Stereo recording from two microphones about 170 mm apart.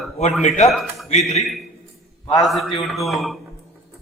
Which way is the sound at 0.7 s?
Centre (ahead or behind).